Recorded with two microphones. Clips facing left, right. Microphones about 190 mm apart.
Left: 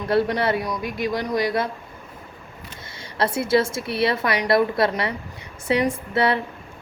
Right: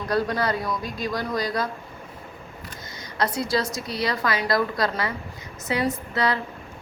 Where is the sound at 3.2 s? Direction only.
25° left (ahead or behind).